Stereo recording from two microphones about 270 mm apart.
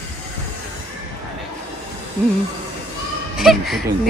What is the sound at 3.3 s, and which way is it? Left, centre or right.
Speech, centre.